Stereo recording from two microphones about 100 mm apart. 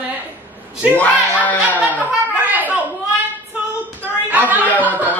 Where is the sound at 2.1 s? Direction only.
15° right (ahead or behind).